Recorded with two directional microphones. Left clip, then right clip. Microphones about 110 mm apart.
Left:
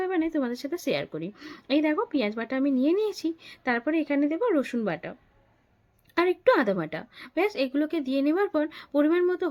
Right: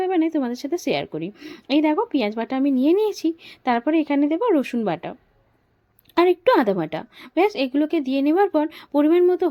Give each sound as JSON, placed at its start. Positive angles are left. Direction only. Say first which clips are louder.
{"t": 0.0, "sound": "a woman's voice", "louder": "right 6 dB", "side_deg": -30}
{"t": 1.4, "sound": "speech", "louder": "right 4 dB", "side_deg": -20}
{"t": 1.6, "sound": "a woman's voice", "louder": "right 5 dB", "side_deg": -30}
{"t": 6.1, "sound": "a woman's voice", "louder": "right 5 dB", "side_deg": -40}